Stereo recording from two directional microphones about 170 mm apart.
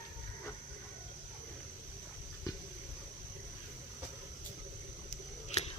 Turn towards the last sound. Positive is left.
turn(degrees=40)  # may be behind; listen again after turning